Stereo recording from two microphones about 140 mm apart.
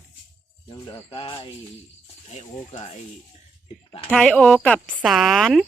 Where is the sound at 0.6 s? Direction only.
30° left (ahead or behind).